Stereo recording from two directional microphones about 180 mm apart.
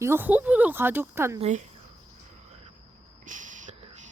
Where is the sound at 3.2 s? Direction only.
45° right (ahead or behind).